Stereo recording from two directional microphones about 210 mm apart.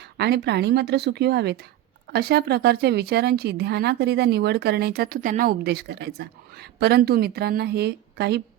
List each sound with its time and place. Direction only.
0.0 s speech: 50° right (ahead or behind)